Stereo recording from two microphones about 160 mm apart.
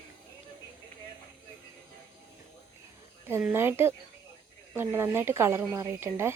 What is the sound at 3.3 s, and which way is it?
Speech, 15° right (ahead or behind).